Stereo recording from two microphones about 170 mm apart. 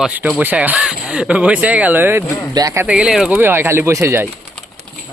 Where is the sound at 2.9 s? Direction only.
5° right (ahead or behind).